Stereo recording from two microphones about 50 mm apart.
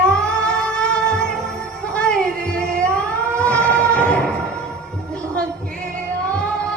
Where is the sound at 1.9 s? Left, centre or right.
Centre.